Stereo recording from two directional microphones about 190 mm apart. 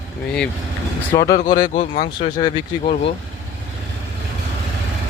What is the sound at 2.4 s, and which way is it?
Speech, 30° left (ahead or behind).